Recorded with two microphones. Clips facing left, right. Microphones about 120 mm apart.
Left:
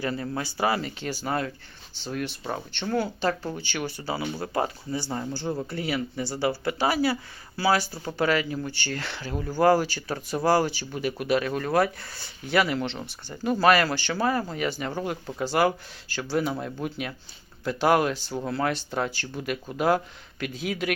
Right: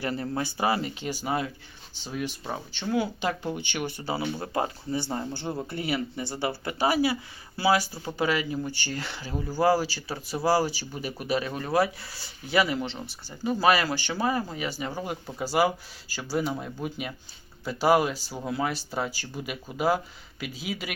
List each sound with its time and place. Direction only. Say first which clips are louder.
0.0 s speech: even; 25° right (ahead or behind)
1.0 s speech: left 1 dB; 10° right (ahead or behind)
11.3 s speech: left 1 dB; 20° right (ahead or behind); by 20.9 s 5° right (ahead or behind)